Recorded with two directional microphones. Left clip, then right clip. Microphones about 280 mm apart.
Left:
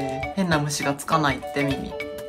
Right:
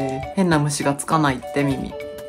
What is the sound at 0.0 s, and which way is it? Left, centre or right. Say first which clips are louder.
Speech: right 4 dB; centre.